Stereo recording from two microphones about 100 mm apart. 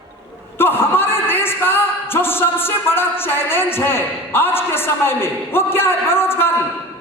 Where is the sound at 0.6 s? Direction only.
20° left (ahead or behind).